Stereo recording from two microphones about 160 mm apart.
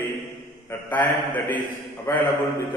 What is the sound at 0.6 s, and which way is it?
A man's voice, 10° left (ahead or behind).